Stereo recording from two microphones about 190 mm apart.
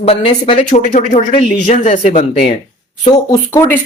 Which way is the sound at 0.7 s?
45° left (ahead or behind).